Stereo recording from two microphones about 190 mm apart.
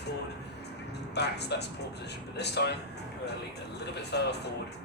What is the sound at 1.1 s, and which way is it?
Speech, 60° left (ahead or behind).